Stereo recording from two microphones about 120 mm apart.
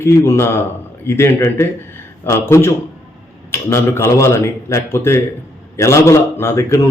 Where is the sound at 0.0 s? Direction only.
20° left (ahead or behind).